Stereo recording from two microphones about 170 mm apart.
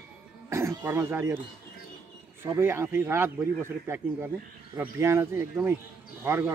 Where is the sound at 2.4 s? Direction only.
15° right (ahead or behind).